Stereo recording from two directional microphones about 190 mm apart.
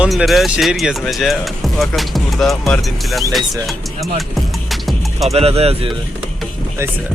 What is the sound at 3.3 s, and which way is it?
Music, centre (ahead or behind).